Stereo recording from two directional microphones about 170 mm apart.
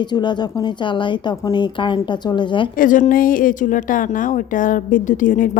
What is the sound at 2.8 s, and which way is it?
A woman's voice, 50° left (ahead or behind).